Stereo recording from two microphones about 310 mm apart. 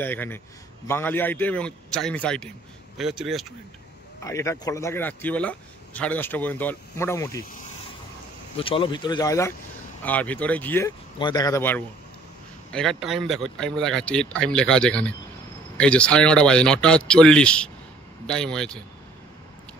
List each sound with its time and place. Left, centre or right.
0.0 s speech: centre
8.5 s speech: centre